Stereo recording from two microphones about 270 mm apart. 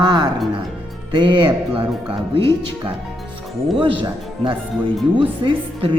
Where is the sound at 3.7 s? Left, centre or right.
Centre.